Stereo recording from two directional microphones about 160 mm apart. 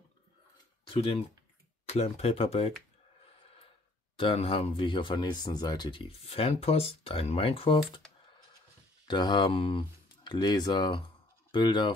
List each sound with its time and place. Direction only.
0.9 s speech: 35° left (ahead or behind)
4.2 s speech: 35° left (ahead or behind)
9.0 s speech: 30° left (ahead or behind)